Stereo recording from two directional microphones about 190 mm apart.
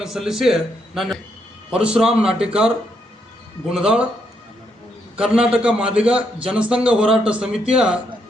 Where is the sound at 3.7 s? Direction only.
5° right (ahead or behind).